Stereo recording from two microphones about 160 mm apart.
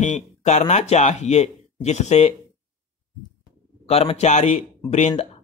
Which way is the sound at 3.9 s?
40° left (ahead or behind).